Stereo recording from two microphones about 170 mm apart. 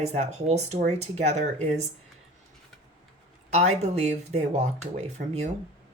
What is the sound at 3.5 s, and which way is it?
Speech, 40° right (ahead or behind).